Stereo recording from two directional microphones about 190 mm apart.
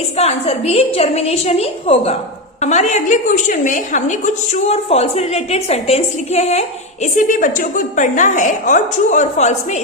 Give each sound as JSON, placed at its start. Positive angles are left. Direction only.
{"t": 0.2, "sound": "a woman's voice", "side_deg": 35}